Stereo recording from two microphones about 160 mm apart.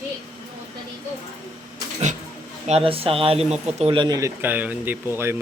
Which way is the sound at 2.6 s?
35° right (ahead or behind).